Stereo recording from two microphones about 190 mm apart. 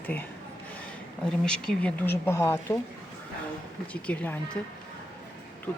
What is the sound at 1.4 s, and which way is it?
Speech, 5° left (ahead or behind).